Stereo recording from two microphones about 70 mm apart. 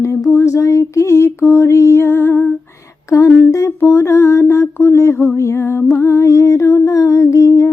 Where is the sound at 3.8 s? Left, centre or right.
Left.